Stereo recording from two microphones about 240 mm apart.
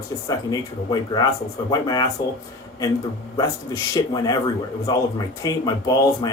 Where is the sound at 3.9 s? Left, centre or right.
Centre.